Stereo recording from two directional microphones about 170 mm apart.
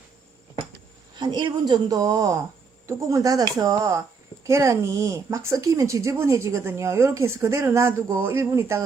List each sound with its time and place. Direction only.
1.1 s a woman's voice: 25° right (ahead or behind)